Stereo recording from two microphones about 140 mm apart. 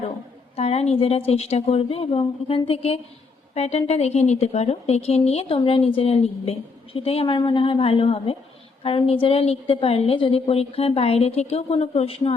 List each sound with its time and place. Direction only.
0.5 s a woman's voice: 45° left (ahead or behind)